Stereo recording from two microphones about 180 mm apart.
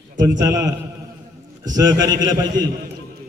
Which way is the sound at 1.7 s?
20° right (ahead or behind).